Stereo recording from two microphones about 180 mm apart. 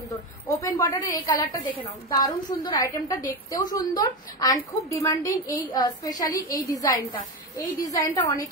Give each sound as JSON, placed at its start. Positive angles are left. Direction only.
{"t": 0.1, "sound": "a woman's voice", "side_deg": 20}